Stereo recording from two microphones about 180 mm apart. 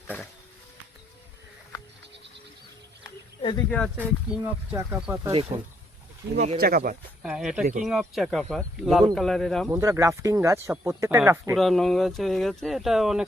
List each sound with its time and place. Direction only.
3.0 s wild animals: 25° left (ahead or behind)
3.7 s speech: 5° left (ahead or behind)
4.3 s speech: 10° right (ahead or behind)
5.5 s speech: 35° right (ahead or behind)
6.6 s speech: 55° right (ahead or behind)
7.2 s speech: 5° right (ahead or behind)
7.6 s speech: 40° right (ahead or behind)
7.9 s speech: centre (ahead or behind)
9.6 s speech: 15° right (ahead or behind)
11.5 s speech: centre (ahead or behind)